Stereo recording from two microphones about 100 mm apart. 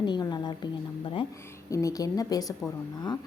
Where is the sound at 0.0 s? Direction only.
50° left (ahead or behind).